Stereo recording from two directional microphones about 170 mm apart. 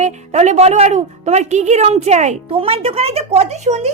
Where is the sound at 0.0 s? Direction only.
40° right (ahead or behind).